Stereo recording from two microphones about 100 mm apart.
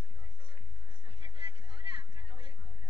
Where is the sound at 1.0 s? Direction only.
60° right (ahead or behind).